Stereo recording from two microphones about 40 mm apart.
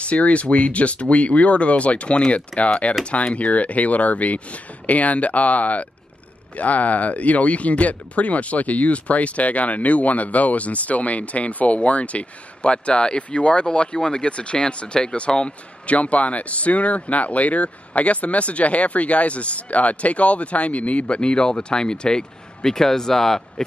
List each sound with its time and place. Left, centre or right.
0.0 s speech: left; by 23.4 s centre